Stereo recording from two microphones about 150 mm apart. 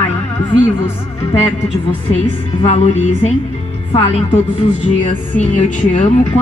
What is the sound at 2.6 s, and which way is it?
A woman's voice, 50° left (ahead or behind).